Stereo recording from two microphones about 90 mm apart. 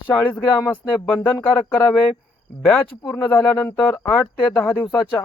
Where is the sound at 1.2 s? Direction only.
20° left (ahead or behind).